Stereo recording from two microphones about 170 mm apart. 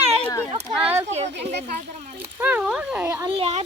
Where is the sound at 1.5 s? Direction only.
80° right.